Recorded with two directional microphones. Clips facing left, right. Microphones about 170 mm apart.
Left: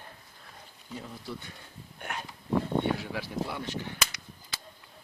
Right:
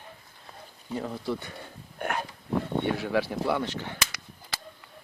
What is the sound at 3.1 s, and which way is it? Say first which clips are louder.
Cap gun: right 8 dB; 75° right (ahead or behind).